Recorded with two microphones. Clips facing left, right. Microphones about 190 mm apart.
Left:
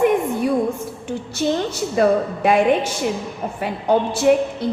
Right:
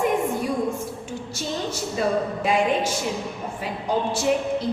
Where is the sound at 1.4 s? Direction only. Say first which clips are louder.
Left 8 dB; 65° left (ahead or behind).